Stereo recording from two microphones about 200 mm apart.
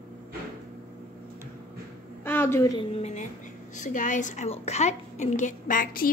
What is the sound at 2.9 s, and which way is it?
A woman's voice, 35° left (ahead or behind).